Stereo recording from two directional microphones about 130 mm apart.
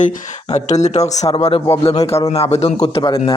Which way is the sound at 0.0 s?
60° left (ahead or behind).